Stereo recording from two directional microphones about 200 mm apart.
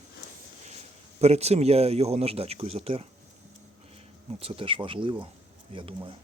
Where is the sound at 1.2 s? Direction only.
30° right (ahead or behind).